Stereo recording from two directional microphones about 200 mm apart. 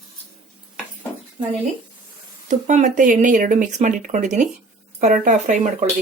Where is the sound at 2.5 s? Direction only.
40° right (ahead or behind).